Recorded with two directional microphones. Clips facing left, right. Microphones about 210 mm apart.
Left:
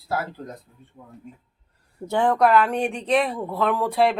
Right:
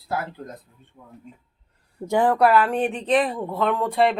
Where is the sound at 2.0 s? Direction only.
10° right (ahead or behind).